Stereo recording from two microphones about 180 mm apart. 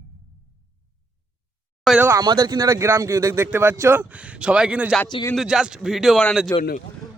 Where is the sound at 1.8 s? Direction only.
5° right (ahead or behind).